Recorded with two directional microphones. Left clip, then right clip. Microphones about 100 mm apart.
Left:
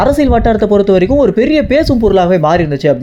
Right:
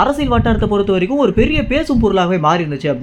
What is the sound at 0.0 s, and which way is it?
Speech, 50° left (ahead or behind).